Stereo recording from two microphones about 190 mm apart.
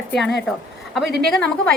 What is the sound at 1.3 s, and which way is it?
Speech, 5° left (ahead or behind).